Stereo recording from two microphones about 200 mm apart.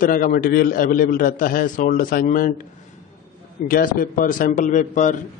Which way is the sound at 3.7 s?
45° left (ahead or behind).